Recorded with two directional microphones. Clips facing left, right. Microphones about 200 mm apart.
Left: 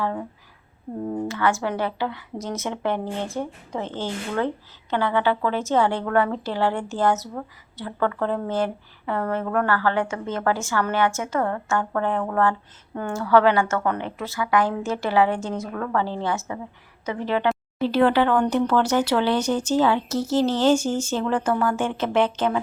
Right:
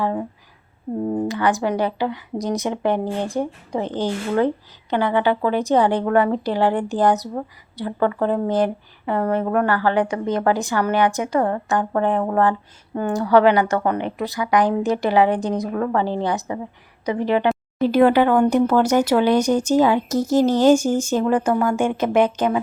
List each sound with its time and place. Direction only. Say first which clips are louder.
0.0 s speech: right 4 dB; 20° right (ahead or behind)